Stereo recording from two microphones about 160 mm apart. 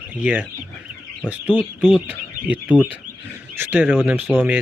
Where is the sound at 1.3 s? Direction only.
10° right (ahead or behind).